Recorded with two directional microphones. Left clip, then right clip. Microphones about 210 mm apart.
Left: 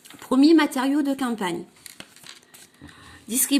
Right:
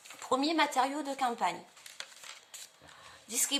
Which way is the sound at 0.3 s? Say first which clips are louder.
Left 11 dB; 25° left (ahead or behind).